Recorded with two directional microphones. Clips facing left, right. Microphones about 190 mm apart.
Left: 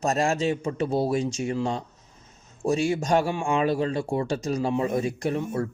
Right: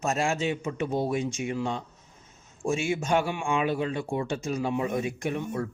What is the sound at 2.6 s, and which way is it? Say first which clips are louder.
A man's voice: left 4 dB; 35° left (ahead or behind).